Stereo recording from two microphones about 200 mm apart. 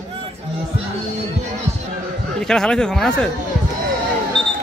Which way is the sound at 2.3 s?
5° left (ahead or behind).